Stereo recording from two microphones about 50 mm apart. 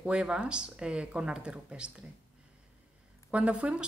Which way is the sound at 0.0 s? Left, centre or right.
Right.